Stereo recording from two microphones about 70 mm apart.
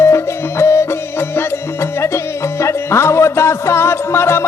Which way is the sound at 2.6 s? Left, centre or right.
Left.